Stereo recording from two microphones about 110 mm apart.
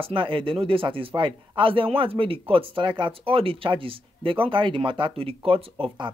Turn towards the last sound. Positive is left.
turn(degrees=-55)  # may be behind; listen again after turning